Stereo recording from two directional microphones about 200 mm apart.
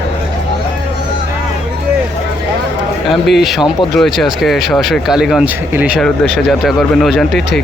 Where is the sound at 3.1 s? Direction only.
Centre (ahead or behind).